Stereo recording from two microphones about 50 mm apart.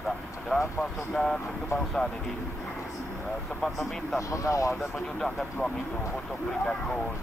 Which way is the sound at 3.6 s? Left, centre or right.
Centre.